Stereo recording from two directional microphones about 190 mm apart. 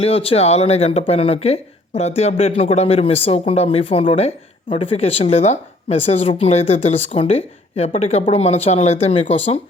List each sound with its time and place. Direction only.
0.0 s speech: 30° left (ahead or behind)